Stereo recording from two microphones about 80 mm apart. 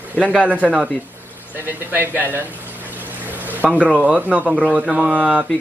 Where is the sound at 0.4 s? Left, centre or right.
Centre.